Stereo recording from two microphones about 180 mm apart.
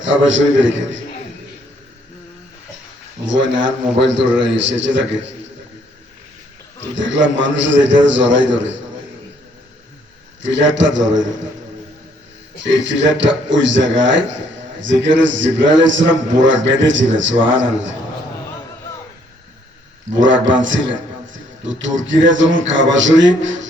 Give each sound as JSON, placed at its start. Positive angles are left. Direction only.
{"t": 0.0, "sound": "a man's voice", "side_deg": -90}
{"t": 3.2, "sound": "a man's voice", "side_deg": -90}
{"t": 6.9, "sound": "a man's voice", "side_deg": -90}
{"t": 10.4, "sound": "a man's voice", "side_deg": -90}
{"t": 12.6, "sound": "a man's voice", "side_deg": -90}
{"t": 20.1, "sound": "a man's voice", "side_deg": -90}